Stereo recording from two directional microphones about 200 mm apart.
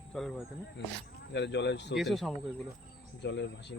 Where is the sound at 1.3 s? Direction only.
60° left (ahead or behind).